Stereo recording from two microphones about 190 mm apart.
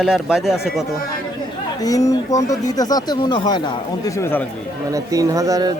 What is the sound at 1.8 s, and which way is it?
Speech, 20° left (ahead or behind).